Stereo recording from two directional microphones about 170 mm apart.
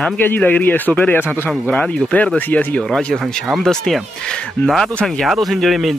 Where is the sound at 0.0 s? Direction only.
10° left (ahead or behind).